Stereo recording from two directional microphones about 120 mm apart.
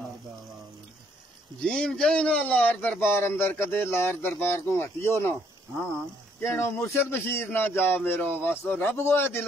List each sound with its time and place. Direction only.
1.6 s speech: 5° left (ahead or behind)
6.4 s speech: 20° left (ahead or behind)